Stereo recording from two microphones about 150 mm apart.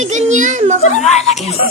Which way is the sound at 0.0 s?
50° right (ahead or behind).